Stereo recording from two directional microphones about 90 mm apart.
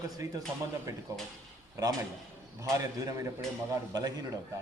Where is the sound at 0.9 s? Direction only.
35° right (ahead or behind).